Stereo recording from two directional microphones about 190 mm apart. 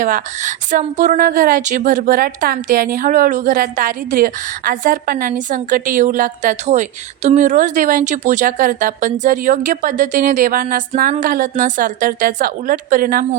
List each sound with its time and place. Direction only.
0.0 s a woman's voice: 45° right (ahead or behind)